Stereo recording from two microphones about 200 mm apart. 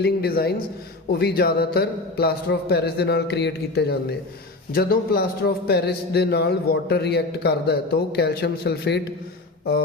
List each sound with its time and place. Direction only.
0.0 s a man's voice: 50° left (ahead or behind)